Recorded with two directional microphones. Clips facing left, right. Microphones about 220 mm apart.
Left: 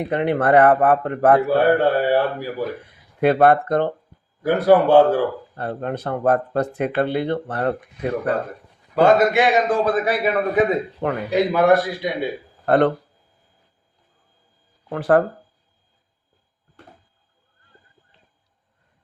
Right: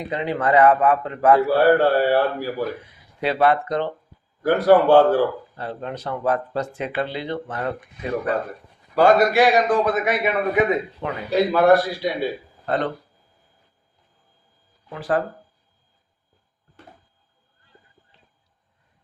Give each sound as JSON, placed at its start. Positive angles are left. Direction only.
{"t": 0.0, "sound": "speech", "side_deg": 60}
{"t": 1.5, "sound": "speech", "side_deg": 20}
{"t": 3.2, "sound": "speech", "side_deg": 50}
{"t": 4.4, "sound": "speech", "side_deg": 15}
{"t": 5.5, "sound": "speech", "side_deg": 55}
{"t": 9.0, "sound": "a man's voice", "side_deg": 20}
{"t": 11.3, "sound": "a man's voice", "side_deg": 20}
{"t": 12.6, "sound": "speech", "side_deg": 60}
{"t": 14.8, "sound": "speech", "side_deg": 60}